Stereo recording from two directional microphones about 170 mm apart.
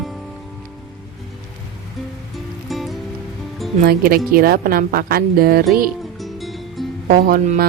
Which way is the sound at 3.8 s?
60° right (ahead or behind).